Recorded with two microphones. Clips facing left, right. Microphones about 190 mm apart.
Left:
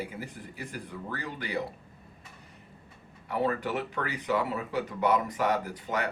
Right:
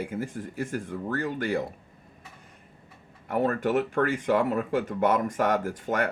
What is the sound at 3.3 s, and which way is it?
Speech, 50° right (ahead or behind).